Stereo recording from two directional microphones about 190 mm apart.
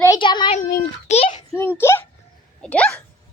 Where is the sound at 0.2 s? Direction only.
25° left (ahead or behind).